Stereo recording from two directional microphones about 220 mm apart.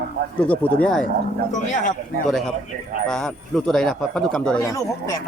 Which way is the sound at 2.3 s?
Centre (ahead or behind).